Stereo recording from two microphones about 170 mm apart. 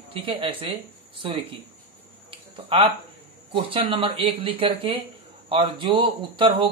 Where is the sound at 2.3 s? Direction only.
30° right (ahead or behind).